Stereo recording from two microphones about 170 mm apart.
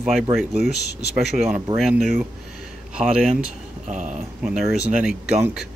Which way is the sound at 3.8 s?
45° right (ahead or behind).